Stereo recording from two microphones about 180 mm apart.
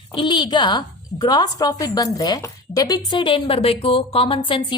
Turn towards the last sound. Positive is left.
turn(degrees=25)  # may be behind; listen again after turning